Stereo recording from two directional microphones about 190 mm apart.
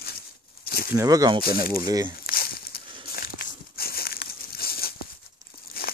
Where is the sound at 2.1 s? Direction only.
50° left (ahead or behind).